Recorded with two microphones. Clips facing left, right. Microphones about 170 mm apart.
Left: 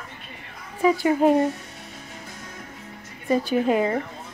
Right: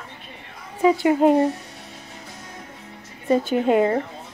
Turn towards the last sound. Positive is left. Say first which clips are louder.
# right 3 dB
turn(degrees=-25)  # may be behind; listen again after turning